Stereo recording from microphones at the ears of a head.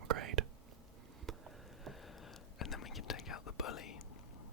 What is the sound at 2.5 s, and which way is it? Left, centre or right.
Whispering, left.